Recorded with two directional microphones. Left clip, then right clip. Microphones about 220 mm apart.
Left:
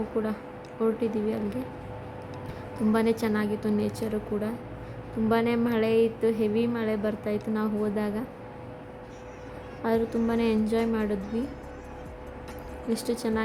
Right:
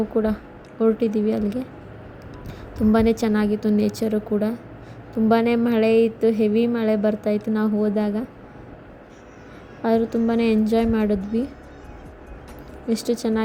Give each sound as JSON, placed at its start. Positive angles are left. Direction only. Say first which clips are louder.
{"t": 0.1, "sound": "a woman's voice", "louder": "right 7 dB", "side_deg": -20}
{"t": 2.7, "sound": "a woman's voice", "louder": "right 6 dB", "side_deg": -20}
{"t": 9.8, "sound": "a woman's voice", "louder": "right 6 dB", "side_deg": -15}
{"t": 12.9, "sound": "a woman's voice", "louder": "right 6 dB", "side_deg": -15}